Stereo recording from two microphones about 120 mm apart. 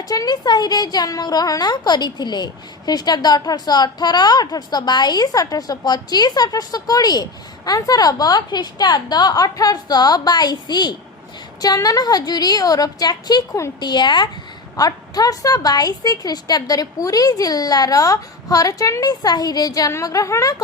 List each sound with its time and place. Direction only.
0.1 s a woman's voice: 35° left (ahead or behind)